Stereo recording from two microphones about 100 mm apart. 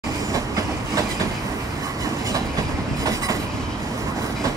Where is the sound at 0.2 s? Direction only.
35° right (ahead or behind).